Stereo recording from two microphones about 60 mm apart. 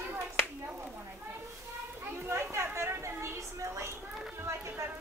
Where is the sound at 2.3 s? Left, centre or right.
Right.